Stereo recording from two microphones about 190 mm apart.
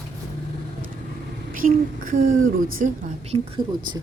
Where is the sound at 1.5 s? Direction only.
45° right (ahead or behind).